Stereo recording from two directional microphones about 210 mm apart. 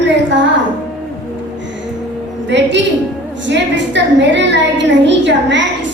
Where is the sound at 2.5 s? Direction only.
60° right (ahead or behind).